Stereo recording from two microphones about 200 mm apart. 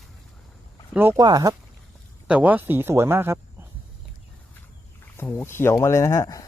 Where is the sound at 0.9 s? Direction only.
15° right (ahead or behind).